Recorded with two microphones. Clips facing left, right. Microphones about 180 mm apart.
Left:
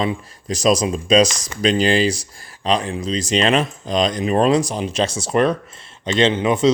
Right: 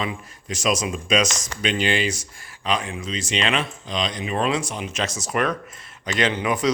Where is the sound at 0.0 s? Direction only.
35° left (ahead or behind).